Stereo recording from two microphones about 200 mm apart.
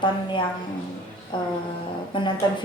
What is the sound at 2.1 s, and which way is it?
Speech, 25° left (ahead or behind).